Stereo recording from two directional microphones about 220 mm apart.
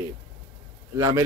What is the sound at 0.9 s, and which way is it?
Speech, 15° right (ahead or behind).